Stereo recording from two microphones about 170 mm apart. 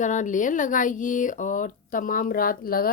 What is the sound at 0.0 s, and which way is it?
A woman's voice, 45° left (ahead or behind).